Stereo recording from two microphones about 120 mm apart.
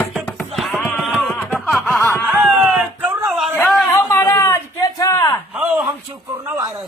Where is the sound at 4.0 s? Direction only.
25° left (ahead or behind).